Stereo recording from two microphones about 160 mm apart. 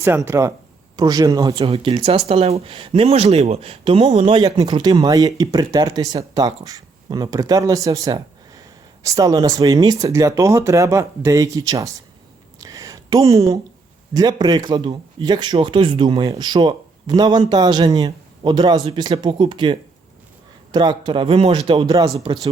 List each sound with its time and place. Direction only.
0.0 s speech: 15° right (ahead or behind)
1.5 s speech: 35° right (ahead or behind)
12.5 s a sound: 20° right (ahead or behind)
14.1 s speech: 25° right (ahead or behind)
21.8 s speech: 25° right (ahead or behind)